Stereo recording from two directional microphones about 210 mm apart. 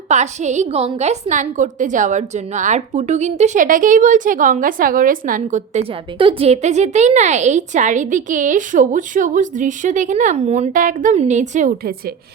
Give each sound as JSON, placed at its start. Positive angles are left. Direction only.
{"t": 0.1, "sound": "a woman's voice", "side_deg": -35}
{"t": 6.1, "sound": "a woman's voice", "side_deg": -25}